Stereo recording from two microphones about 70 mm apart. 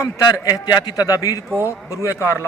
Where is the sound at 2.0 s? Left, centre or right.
Left.